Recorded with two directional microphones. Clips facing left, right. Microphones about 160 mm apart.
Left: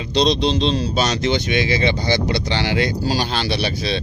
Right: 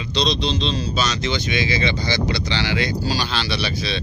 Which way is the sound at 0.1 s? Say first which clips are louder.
Left 5 dB; 55° left (ahead or behind).